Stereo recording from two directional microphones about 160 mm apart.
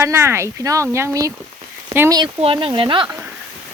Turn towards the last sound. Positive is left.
turn(degrees=-30)  # may be behind; listen again after turning